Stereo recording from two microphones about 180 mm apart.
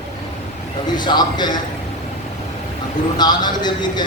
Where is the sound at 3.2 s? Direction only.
25° left (ahead or behind).